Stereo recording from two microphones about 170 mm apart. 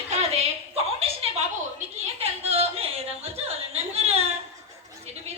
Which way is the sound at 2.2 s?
35° right (ahead or behind).